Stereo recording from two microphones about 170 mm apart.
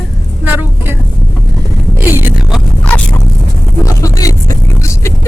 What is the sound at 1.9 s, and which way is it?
Speech, 10° right (ahead or behind).